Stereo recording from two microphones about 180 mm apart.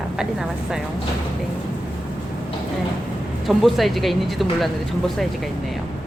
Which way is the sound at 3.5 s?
Centre (ahead or behind).